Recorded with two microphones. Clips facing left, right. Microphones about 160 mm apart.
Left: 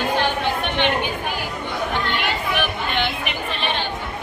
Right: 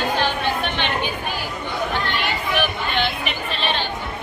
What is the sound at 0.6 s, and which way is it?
Chatter, 15° left (ahead or behind).